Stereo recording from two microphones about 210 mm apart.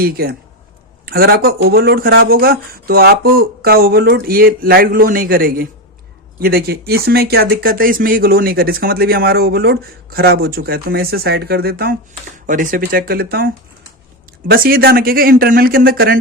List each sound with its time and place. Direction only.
0.0 s speech: 45° right (ahead or behind)
14.5 s speech: 45° right (ahead or behind)